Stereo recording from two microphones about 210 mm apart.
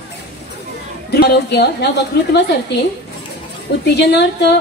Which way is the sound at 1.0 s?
50° left (ahead or behind).